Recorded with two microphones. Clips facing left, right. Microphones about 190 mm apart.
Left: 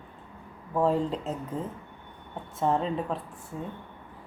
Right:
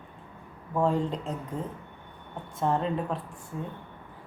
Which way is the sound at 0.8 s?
5° left (ahead or behind).